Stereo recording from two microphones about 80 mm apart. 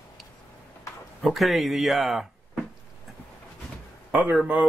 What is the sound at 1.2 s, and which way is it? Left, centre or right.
Speech, centre.